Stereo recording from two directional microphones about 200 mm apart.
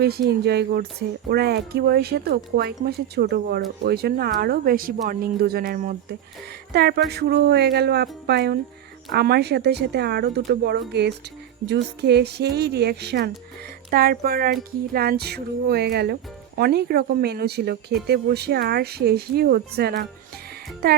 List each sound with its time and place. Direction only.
0.0 s speech: 55° right (ahead or behind)